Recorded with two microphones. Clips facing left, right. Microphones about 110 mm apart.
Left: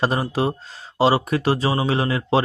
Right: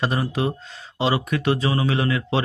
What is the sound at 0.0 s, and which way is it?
Speech, 35° left (ahead or behind).